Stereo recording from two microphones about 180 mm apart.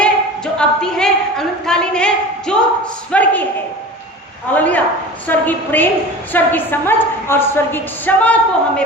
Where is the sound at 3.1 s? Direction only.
10° left (ahead or behind).